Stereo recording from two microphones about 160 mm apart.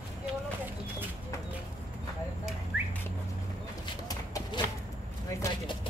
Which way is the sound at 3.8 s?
30° left (ahead or behind).